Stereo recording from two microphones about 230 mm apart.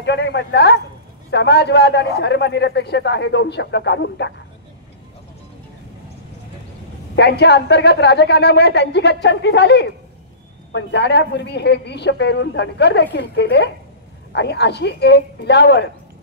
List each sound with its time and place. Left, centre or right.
0.0 s a man's voice: left
7.2 s a man's voice: left